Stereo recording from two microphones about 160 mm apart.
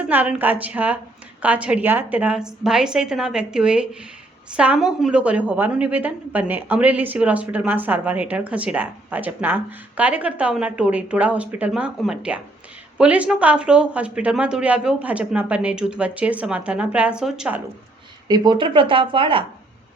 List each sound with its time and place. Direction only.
0.1 s a woman's voice: 10° right (ahead or behind)
18.3 s speech: 25° right (ahead or behind)